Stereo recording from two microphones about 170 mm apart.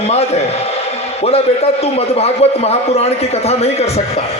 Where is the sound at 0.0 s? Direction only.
40° left (ahead or behind).